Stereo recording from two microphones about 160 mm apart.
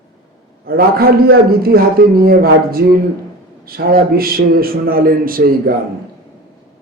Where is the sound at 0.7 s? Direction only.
70° right (ahead or behind).